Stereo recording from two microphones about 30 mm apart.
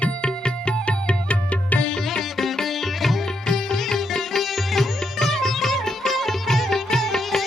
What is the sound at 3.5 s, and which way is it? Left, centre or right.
Sitar, centre.